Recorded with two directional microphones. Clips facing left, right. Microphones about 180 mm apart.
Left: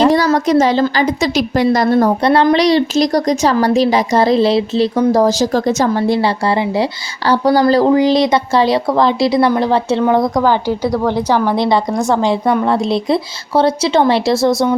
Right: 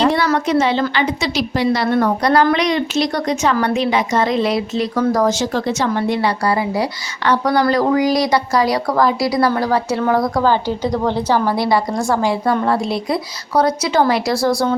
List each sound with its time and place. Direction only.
0.0 s a sound: 40° left (ahead or behind)
0.3 s a woman's voice: 40° left (ahead or behind); by 10.8 s 15° left (ahead or behind)
10.8 s a woman's voice: 15° right (ahead or behind)
11.5 s a woman's voice: 20° left (ahead or behind)